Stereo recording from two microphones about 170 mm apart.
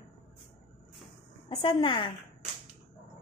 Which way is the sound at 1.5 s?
35° left (ahead or behind).